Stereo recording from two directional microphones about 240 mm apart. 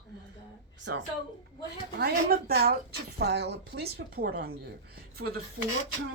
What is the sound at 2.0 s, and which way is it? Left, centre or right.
Speech, right.